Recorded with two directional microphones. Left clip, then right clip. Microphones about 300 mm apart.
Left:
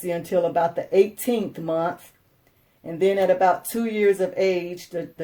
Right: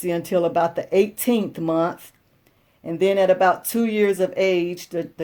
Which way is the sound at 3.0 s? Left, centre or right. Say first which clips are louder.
Right 2 dB; right.